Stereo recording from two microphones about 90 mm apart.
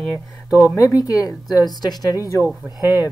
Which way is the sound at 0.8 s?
40° left (ahead or behind).